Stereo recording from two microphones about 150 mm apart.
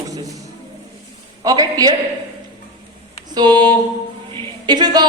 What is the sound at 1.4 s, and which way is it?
Speech, 25° right (ahead or behind).